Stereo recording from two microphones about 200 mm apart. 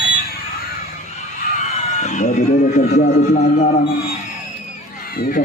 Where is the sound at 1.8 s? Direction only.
35° left (ahead or behind).